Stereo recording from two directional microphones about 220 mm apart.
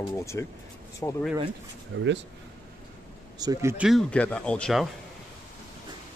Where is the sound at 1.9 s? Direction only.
55° right (ahead or behind).